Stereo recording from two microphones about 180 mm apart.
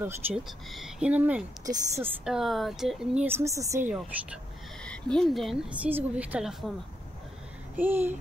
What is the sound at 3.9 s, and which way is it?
Speech, 5° right (ahead or behind).